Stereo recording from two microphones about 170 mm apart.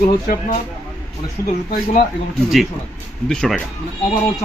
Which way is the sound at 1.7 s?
55° left (ahead or behind).